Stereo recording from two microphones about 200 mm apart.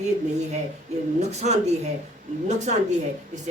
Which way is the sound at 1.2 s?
35° right (ahead or behind).